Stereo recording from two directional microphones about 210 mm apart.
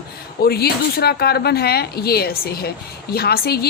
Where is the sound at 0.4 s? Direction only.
50° left (ahead or behind).